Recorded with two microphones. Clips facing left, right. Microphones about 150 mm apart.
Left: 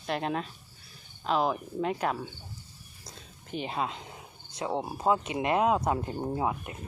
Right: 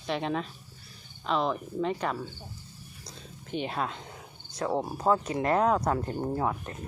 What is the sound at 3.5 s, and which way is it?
Speech, centre (ahead or behind).